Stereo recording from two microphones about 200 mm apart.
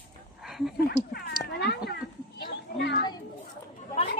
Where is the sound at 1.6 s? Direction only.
55° left (ahead or behind).